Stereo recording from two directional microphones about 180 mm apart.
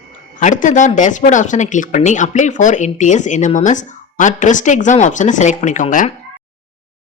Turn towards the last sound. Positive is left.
turn(degrees=45)  # may be behind; listen again after turning